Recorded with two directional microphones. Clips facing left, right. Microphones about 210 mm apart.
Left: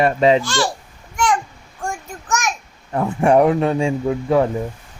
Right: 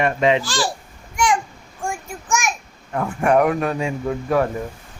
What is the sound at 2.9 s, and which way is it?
A man's voice, 25° left (ahead or behind).